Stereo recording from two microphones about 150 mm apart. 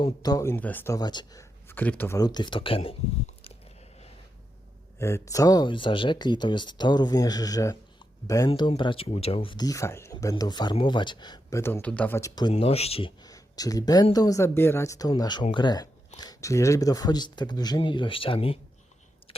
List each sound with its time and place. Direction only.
0.0 s speech: 25° left (ahead or behind)
0.9 s speech: 30° left (ahead or behind); by 2.1 s 10° left (ahead or behind)
2.1 s speech: 25° left (ahead or behind)
4.9 s speech: 20° left (ahead or behind)
8.4 s speech: 35° left (ahead or behind)
11.6 s speech: 10° left (ahead or behind); by 12.5 s 25° left (ahead or behind)
12.5 s speech: 40° left (ahead or behind)
13.3 s speech: 25° left (ahead or behind)
19.3 s a sound: 40° left (ahead or behind)